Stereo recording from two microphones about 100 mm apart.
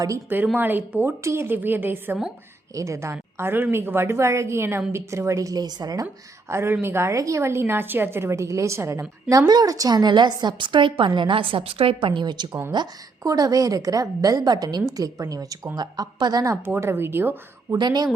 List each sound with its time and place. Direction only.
0.5 s a woman's voice: 20° right (ahead or behind)
2.7 s a woman's voice: 30° right (ahead or behind)
6.5 s a woman's voice: 25° right (ahead or behind)
9.5 s a woman's voice: 40° right (ahead or behind)
12.5 s a woman's voice: 25° right (ahead or behind)
12.7 s a woman's voice: 40° right (ahead or behind)
16.6 s a woman's voice: 25° right (ahead or behind)
17.7 s a woman's voice: 45° right (ahead or behind)